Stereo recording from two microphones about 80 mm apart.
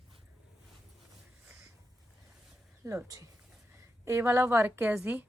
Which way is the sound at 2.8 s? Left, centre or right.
Right.